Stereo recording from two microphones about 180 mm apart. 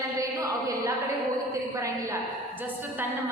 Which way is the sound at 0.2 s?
20° right (ahead or behind).